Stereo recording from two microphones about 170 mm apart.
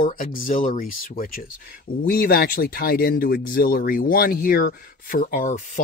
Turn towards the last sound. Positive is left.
turn(degrees=50)  # may be behind; listen again after turning